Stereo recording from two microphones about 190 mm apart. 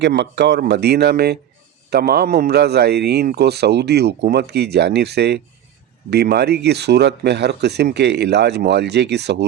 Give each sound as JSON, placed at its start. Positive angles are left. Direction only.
{"t": 0.0, "sound": "a man's voice", "side_deg": -65}